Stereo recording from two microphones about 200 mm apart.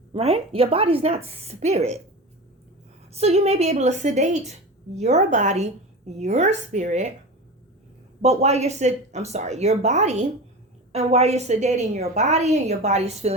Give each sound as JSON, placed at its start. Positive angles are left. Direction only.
{"t": 0.1, "sound": "a woman's voice", "side_deg": -30}
{"t": 3.1, "sound": "a woman's voice", "side_deg": -30}
{"t": 8.2, "sound": "a woman's voice", "side_deg": -30}